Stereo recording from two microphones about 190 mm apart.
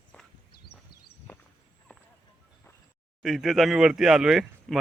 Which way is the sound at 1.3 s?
10° left (ahead or behind).